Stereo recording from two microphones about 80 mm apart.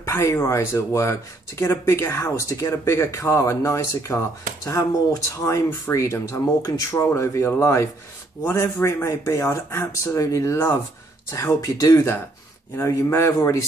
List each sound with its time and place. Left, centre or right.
0.0 s speech: left
5.4 s speech: left